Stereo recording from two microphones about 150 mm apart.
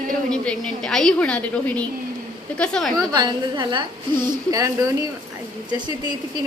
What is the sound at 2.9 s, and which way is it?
A woman's voice, 30° right (ahead or behind).